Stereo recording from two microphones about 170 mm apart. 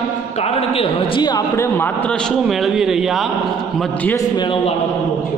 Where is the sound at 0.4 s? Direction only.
35° left (ahead or behind).